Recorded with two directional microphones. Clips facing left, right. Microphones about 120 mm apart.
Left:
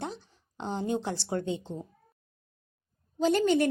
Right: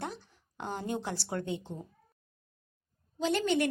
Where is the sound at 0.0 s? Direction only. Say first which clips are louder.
Left 2 dB; 25° left (ahead or behind).